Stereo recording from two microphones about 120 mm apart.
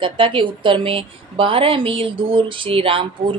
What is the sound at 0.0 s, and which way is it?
Speech, 45° right (ahead or behind).